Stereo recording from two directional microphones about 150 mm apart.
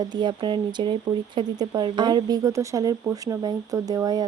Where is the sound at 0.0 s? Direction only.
30° right (ahead or behind).